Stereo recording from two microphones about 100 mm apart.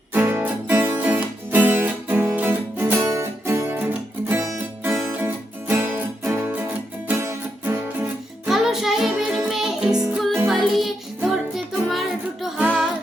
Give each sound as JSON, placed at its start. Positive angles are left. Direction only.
{"t": 0.1, "sound": "music", "side_deg": -20}
{"t": 8.4, "sound": "music", "side_deg": -5}
{"t": 12.5, "sound": "music", "side_deg": -15}